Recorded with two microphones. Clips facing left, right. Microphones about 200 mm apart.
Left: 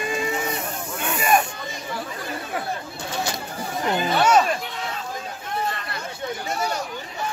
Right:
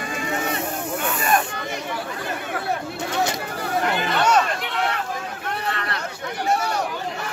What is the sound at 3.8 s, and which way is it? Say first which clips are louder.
Speech: left 3 dB; 70° right (ahead or behind).